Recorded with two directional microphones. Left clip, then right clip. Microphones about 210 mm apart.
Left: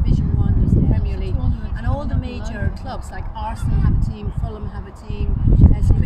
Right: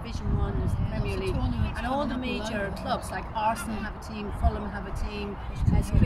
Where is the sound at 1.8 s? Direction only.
10° left (ahead or behind).